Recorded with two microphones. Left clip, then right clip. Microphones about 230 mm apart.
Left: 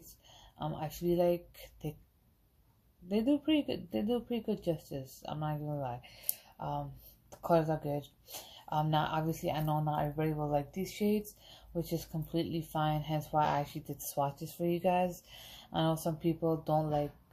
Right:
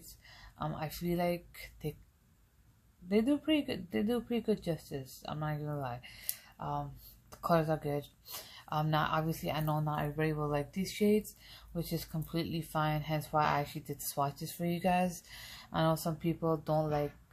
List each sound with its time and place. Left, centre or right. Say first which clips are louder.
0.3 s a sound: even; right
1.0 s speech: left 5 dB; right
3.1 s speech: even; right